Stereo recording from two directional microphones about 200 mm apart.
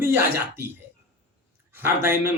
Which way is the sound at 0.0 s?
10° right (ahead or behind).